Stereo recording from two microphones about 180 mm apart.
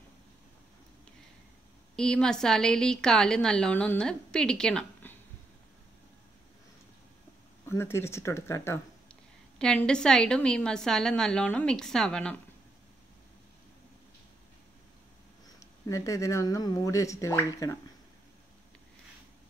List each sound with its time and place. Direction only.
2.0 s a woman's voice: 5° left (ahead or behind)
7.6 s speech: 15° left (ahead or behind)
9.6 s a woman's voice: 5° left (ahead or behind)
15.6 s speech: 15° left (ahead or behind)